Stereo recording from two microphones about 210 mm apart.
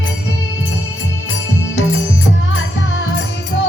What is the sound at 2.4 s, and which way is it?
Music, 70° left (ahead or behind).